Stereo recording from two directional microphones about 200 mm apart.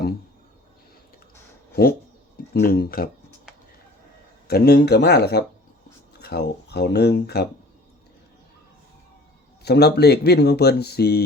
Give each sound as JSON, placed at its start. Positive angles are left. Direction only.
{"t": 2.5, "sound": "speech", "side_deg": 50}
{"t": 4.4, "sound": "speech", "side_deg": 50}
{"t": 9.6, "sound": "speech", "side_deg": 55}